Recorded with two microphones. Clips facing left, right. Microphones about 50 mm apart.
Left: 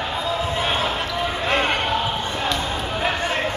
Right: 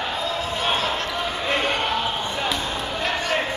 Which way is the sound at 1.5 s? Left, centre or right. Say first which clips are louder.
Left 2 dB; left.